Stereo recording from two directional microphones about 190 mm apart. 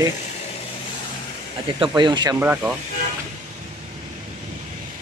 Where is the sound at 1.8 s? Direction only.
25° right (ahead or behind).